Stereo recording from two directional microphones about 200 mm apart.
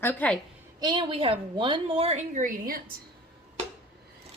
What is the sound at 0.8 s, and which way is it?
A woman's voice, 20° right (ahead or behind).